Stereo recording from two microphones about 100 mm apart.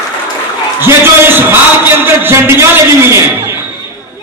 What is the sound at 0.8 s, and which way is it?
A man's voice, 20° right (ahead or behind).